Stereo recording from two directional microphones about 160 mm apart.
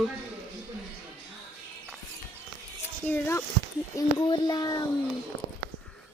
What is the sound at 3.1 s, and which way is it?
Speech, 15° left (ahead or behind).